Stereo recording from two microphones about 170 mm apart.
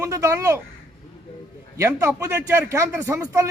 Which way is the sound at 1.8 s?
15° right (ahead or behind).